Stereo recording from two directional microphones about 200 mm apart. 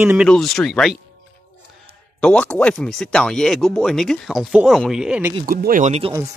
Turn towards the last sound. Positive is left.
turn(degrees=-30)  # may be behind; listen again after turning